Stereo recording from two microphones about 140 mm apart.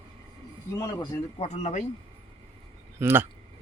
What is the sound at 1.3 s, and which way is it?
Speech, 50° left (ahead or behind).